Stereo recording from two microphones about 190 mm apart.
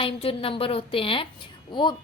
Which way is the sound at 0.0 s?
30° left (ahead or behind).